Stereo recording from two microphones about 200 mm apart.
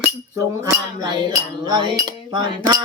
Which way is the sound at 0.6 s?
20° right (ahead or behind).